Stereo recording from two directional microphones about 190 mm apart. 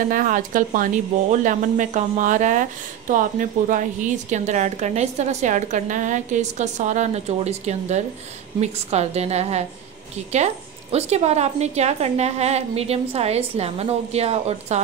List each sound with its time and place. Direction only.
0.1 s a woman's voice: 45° right (ahead or behind)